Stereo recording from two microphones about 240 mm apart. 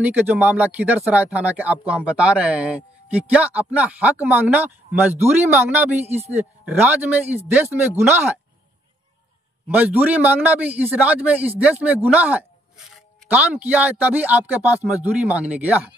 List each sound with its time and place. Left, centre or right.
0.0 s a man's voice: centre
5.9 s a man's voice: right
6.3 s a man's voice: centre
9.7 s a man's voice: centre